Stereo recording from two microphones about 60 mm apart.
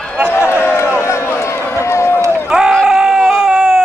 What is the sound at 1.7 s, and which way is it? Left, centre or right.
Run, left.